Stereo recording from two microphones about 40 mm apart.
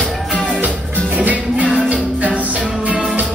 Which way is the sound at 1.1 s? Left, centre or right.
Right.